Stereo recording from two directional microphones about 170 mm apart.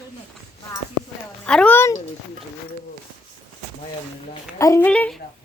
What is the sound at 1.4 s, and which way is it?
Speech, 5° left (ahead or behind).